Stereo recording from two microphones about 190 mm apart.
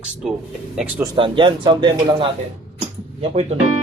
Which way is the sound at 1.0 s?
25° right (ahead or behind).